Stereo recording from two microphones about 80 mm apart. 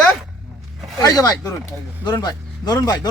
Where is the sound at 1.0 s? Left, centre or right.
Left.